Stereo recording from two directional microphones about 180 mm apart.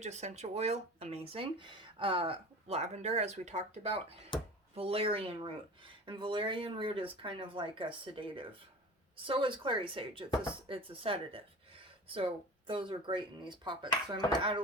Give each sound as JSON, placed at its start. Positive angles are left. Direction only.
{"t": 0.0, "sound": "speech", "side_deg": -40}